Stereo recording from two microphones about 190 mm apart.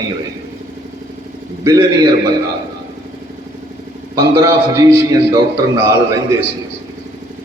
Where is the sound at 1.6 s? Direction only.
20° right (ahead or behind).